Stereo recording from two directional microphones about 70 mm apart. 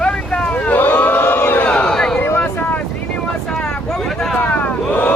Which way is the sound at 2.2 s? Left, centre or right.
Left.